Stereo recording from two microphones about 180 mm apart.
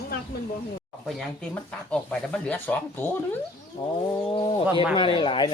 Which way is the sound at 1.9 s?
10° left (ahead or behind).